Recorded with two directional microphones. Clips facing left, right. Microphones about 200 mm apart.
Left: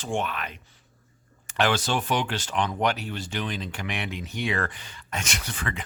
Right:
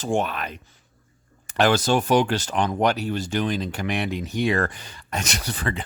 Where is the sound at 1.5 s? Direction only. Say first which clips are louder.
Right 5 dB; 40° right (ahead or behind).